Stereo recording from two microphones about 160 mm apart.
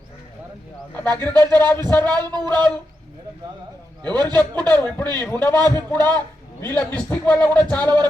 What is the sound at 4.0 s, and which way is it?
Speech, 25° right (ahead or behind).